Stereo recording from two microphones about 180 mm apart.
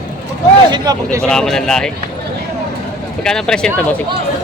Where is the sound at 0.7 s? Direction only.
20° right (ahead or behind).